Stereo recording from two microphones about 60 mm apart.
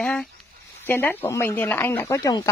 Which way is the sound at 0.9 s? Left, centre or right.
Left.